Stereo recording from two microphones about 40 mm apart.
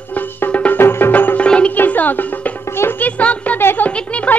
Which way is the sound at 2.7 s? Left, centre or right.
Left.